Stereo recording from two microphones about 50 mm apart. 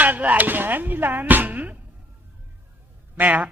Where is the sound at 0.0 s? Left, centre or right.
Right.